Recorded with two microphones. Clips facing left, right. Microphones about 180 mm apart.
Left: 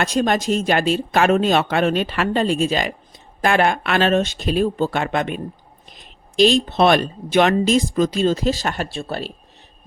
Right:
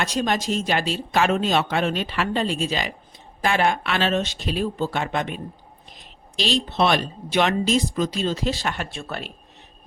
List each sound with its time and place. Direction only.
0.0 s speech: 50° left (ahead or behind); by 9.3 s 35° left (ahead or behind)